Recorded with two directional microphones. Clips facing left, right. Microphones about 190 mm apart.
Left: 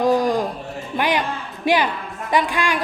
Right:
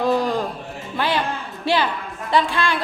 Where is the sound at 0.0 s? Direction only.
15° left (ahead or behind).